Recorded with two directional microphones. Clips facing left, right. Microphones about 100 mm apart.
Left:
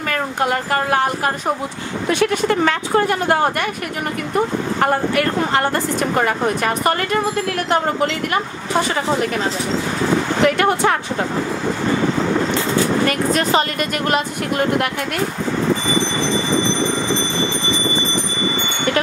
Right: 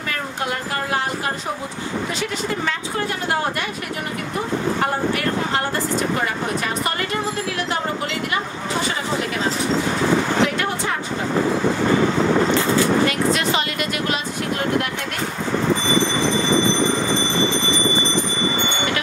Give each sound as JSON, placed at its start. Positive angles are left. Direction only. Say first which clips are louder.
{"t": 0.1, "sound": "a sound", "louder": "left 6 dB", "side_deg": 55}
{"t": 2.0, "sound": "a woman's voice", "louder": "left 12 dB", "side_deg": 60}
{"t": 5.1, "sound": "a woman's voice", "louder": "left 4 dB", "side_deg": 55}
{"t": 10.4, "sound": "a woman's voice", "louder": "left 6 dB", "side_deg": 55}
{"t": 13.3, "sound": "speech", "louder": "left 3 dB", "side_deg": 40}